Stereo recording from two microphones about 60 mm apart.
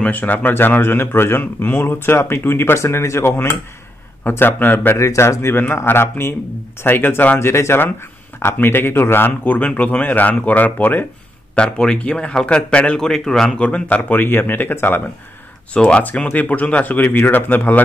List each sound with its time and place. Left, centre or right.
0.0 s speech: left
4.2 s speech: left
4.9 s a man's voice: left
11.5 s a man's voice: centre
13.0 s a man's voice: centre
13.7 s a man's voice: left
14.1 s speech: left
15.7 s a man's voice: centre
16.0 s a man's voice: left